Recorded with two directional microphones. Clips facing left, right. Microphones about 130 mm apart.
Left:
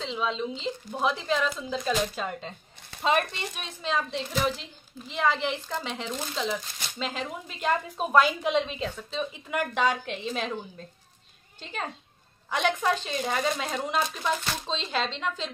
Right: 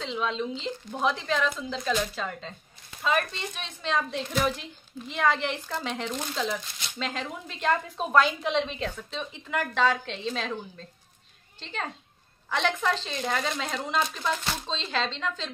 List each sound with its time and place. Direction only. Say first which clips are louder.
0.0 s speech: even; centre (ahead or behind); by 3.6 s 15° left (ahead or behind)
3.8 s a woman's voice: right 1 dB; 5° left (ahead or behind)
11.6 s a woman's voice: even; 10° left (ahead or behind)